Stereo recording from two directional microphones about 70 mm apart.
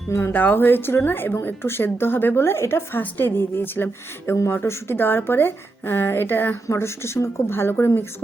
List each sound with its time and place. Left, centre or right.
0.1 s a woman's voice: left
0.3 s a woman's voice: left